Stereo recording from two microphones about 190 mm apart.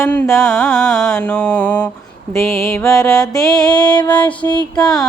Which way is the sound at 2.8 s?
15° left (ahead or behind).